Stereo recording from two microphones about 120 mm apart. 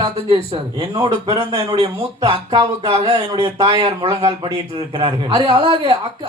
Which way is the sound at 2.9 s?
55° right (ahead or behind).